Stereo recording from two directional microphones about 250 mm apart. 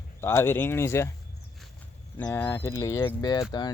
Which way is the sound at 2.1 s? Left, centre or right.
Centre.